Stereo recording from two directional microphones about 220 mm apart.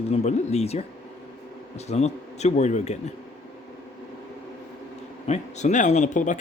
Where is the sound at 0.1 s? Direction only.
30° left (ahead or behind).